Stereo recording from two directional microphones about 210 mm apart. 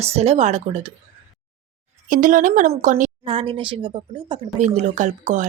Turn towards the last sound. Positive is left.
turn(degrees=-35)  # may be behind; listen again after turning